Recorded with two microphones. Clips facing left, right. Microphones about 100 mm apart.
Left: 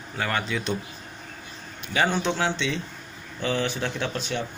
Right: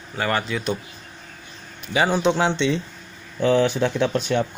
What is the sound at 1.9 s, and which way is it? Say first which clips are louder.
Speech: right 5 dB; 10° right (ahead or behind).